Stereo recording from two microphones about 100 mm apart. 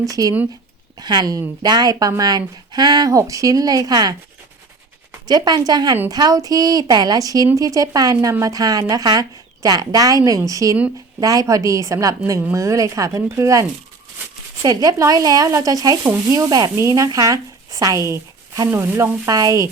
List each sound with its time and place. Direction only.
0.0 s speech: 35° right (ahead or behind)
5.3 s speech: 40° right (ahead or behind)